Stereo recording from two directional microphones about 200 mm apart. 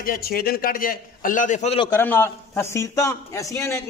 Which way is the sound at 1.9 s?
10° left (ahead or behind).